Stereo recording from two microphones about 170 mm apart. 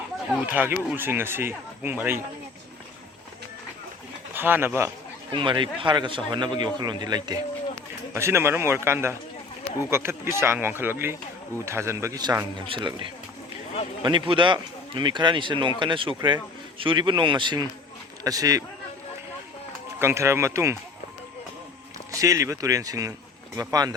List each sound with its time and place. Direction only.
0.3 s speech: 5° right (ahead or behind)
4.4 s speech: 10° right (ahead or behind)
5.3 s a man's voice: 30° right (ahead or behind)
20.0 s speech: 15° right (ahead or behind)
22.1 s a man's voice: 20° right (ahead or behind)